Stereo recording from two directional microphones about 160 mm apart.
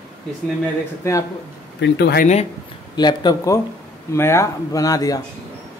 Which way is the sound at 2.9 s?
25° left (ahead or behind).